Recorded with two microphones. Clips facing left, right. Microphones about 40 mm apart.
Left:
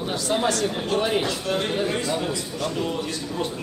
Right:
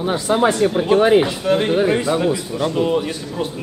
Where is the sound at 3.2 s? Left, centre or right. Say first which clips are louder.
Right 3 dB; centre.